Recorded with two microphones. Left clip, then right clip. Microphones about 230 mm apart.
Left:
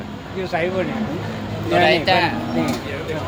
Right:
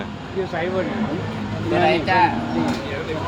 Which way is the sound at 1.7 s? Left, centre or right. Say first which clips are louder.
Left 2 dB; left.